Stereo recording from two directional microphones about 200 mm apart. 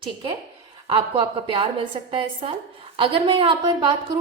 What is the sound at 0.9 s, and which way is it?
A woman's voice, 25° right (ahead or behind).